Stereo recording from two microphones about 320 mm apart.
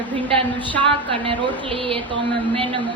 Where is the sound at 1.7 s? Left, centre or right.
Centre.